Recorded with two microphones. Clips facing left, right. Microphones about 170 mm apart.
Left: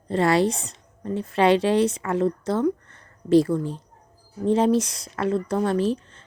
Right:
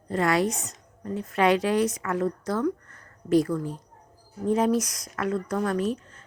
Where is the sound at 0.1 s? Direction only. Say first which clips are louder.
Left 4 dB; 30° left (ahead or behind).